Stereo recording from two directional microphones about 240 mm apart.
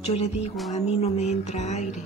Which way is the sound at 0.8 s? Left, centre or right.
Left.